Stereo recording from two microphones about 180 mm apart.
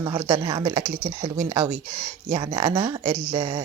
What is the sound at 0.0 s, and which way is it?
Speech, 25° right (ahead or behind).